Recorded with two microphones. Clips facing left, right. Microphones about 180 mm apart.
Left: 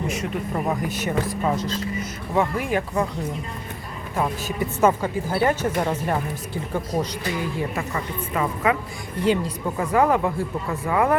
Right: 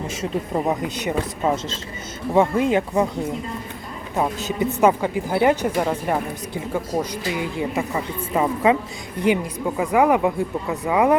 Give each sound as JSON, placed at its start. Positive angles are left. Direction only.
{"t": 0.1, "sound": "speech", "side_deg": -25}
{"t": 4.1, "sound": "a woman's voice", "side_deg": -20}